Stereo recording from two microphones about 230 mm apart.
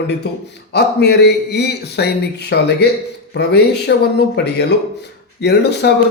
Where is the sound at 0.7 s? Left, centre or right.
Left.